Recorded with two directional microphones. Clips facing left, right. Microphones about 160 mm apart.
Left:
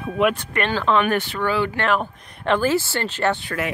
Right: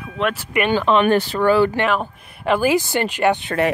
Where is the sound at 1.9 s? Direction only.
5° right (ahead or behind).